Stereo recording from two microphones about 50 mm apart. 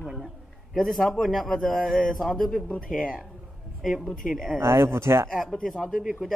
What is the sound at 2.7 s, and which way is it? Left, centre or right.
Speech, left.